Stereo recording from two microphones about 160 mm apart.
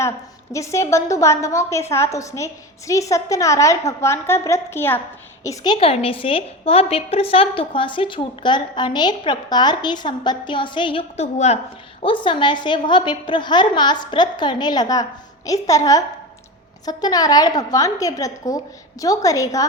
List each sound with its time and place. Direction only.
0.5 s a woman's voice: 20° left (ahead or behind)
11.3 s a woman's voice: 45° left (ahead or behind)
12.0 s a woman's voice: 30° left (ahead or behind)